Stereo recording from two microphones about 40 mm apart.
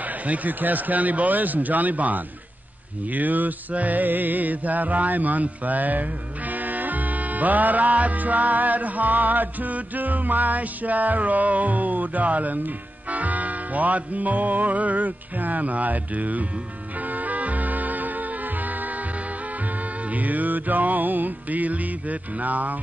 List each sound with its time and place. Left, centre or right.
0.0 s music: right
20.1 s music: right